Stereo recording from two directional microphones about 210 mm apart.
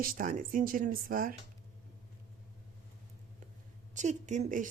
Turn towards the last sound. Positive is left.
turn(degrees=-35)  # may be behind; listen again after turning